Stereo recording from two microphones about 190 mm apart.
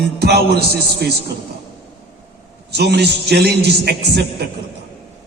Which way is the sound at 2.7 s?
60° right (ahead or behind).